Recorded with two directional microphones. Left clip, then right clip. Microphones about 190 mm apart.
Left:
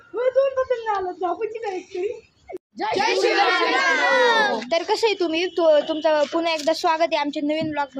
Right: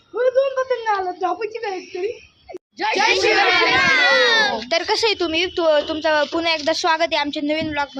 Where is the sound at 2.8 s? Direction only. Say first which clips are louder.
Right 3 dB; 25° left (ahead or behind).